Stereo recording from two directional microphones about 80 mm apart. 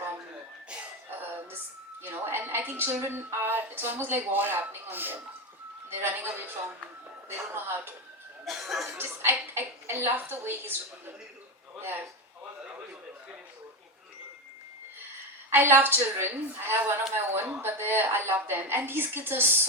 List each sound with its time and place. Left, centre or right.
2.0 s a sound: right
3.0 s speech: right
8.4 s speech: centre
9.0 s a man's voice: right
15.5 s speech: right